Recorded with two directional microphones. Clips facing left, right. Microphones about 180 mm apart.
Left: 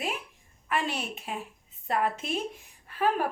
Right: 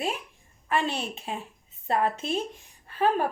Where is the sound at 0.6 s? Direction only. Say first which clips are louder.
Right 3 dB; 30° right (ahead or behind).